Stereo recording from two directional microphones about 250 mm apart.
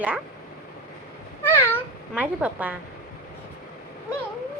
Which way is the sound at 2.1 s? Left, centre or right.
Centre.